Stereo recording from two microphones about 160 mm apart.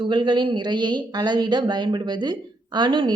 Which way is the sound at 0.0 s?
30° right (ahead or behind).